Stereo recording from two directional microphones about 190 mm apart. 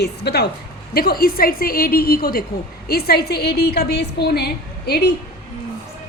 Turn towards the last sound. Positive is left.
turn(degrees=60)  # may be behind; listen again after turning